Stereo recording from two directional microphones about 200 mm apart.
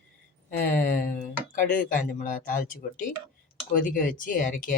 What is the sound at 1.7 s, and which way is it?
Speech, 40° left (ahead or behind).